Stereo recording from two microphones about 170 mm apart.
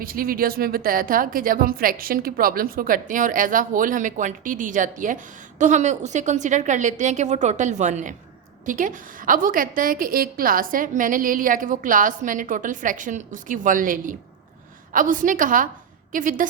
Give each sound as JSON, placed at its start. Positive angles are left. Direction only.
{"t": 0.0, "sound": "speech", "side_deg": -60}